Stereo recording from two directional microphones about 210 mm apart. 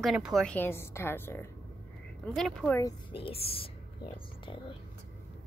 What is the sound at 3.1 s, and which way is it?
Speech, 25° left (ahead or behind).